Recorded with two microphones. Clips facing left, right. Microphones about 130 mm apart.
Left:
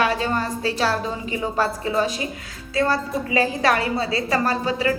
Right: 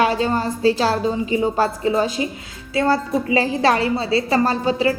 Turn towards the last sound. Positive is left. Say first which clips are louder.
# right 3 dB
turn(degrees=-30)  # may be behind; listen again after turning